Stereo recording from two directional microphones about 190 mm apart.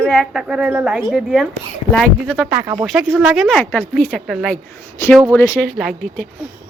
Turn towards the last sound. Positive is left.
turn(degrees=5)  # may be behind; listen again after turning